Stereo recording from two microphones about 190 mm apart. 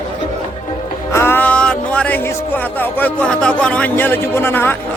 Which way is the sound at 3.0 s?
5° left (ahead or behind).